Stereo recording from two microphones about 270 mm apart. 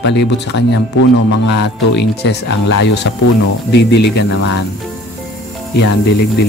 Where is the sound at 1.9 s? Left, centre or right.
Left.